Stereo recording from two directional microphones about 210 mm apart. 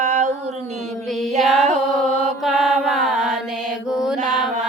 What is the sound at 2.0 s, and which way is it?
Mantra, centre (ahead or behind).